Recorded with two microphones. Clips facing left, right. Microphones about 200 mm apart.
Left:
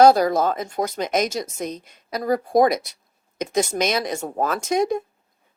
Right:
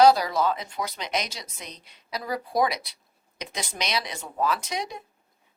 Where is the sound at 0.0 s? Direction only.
50° left (ahead or behind).